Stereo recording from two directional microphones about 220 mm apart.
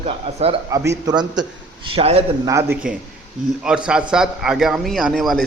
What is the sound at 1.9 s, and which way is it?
Speech, 25° right (ahead or behind).